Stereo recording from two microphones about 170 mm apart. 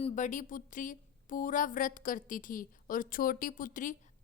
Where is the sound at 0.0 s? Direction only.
45° left (ahead or behind).